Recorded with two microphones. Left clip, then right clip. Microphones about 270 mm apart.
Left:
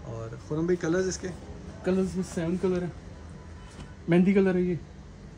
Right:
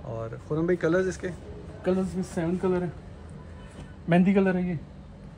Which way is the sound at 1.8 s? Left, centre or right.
Centre.